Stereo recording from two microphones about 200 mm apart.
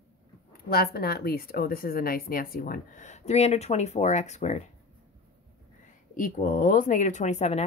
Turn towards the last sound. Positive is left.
turn(degrees=35)  # may be behind; listen again after turning